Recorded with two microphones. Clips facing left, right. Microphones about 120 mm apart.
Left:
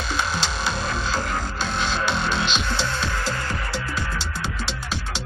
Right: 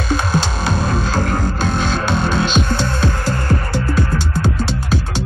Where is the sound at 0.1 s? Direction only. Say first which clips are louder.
Right 8 dB; 50° right (ahead or behind).